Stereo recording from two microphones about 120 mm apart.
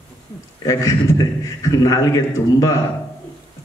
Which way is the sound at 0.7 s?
25° left (ahead or behind).